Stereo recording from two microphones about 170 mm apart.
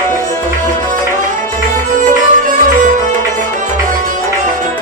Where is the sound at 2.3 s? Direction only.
50° right (ahead or behind).